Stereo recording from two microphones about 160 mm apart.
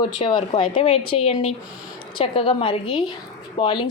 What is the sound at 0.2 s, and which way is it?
Speech, 30° left (ahead or behind).